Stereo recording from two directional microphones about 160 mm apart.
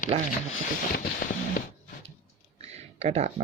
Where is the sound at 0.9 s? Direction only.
65° left (ahead or behind).